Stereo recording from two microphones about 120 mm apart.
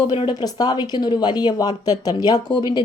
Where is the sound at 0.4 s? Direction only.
35° left (ahead or behind).